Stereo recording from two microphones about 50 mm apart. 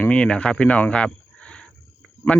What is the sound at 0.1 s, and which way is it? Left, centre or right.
Speech, left.